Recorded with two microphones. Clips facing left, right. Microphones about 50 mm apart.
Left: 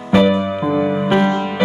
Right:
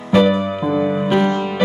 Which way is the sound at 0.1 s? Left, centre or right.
Centre.